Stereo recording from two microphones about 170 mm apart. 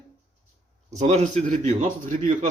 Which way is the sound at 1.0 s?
40° right (ahead or behind).